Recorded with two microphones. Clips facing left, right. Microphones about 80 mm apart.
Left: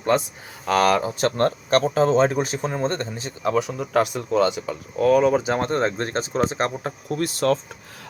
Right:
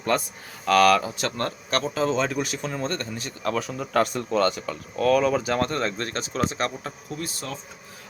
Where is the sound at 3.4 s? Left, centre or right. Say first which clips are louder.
Left 5 dB; centre; by 6.9 s left.